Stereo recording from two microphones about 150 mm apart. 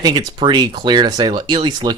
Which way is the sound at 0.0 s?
30° right (ahead or behind).